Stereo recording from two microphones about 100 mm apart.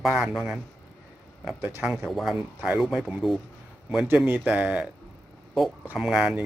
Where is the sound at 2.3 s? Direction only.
10° right (ahead or behind).